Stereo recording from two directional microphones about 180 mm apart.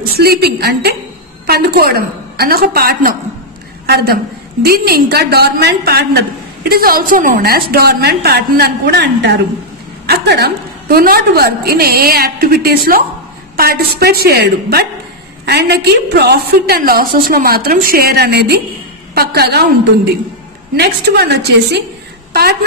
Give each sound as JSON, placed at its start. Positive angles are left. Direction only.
{"t": 0.2, "sound": "a man's voice", "side_deg": -60}
{"t": 20.7, "sound": "a woman's voice", "side_deg": -65}